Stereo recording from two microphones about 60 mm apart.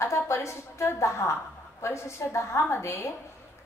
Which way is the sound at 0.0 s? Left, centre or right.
Left.